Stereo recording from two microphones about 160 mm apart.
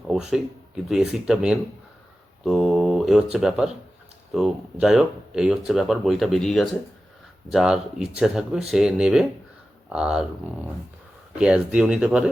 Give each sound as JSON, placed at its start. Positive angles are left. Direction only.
{"t": 0.1, "sound": "speech", "side_deg": 0}
{"t": 11.3, "sound": "speech", "side_deg": -5}